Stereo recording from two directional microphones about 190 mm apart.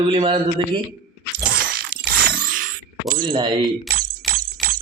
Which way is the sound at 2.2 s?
45° right (ahead or behind).